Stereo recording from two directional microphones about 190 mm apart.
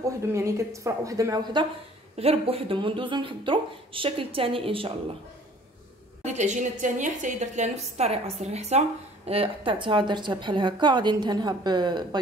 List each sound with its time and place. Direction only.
0.3 s a woman's voice: 15° right (ahead or behind)
6.2 s a woman's voice: 40° right (ahead or behind); by 12.2 s 20° right (ahead or behind)